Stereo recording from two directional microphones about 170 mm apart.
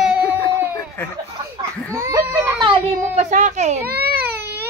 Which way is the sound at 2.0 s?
15° right (ahead or behind).